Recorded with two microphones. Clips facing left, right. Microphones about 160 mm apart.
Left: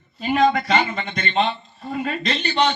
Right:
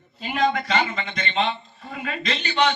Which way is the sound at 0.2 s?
45° left (ahead or behind).